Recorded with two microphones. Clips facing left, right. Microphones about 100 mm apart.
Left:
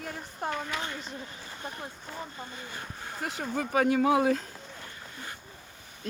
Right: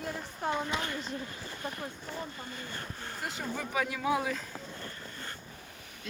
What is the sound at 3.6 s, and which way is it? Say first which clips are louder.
Speech: left 11 dB; 55° left (ahead or behind).